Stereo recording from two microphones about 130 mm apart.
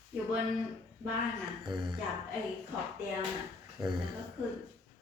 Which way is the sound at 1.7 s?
35° right (ahead or behind).